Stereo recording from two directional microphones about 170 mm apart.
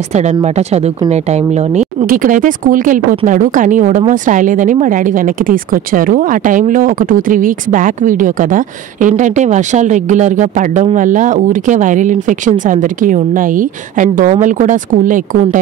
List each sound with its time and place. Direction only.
0.1 s speech: 40° right (ahead or behind)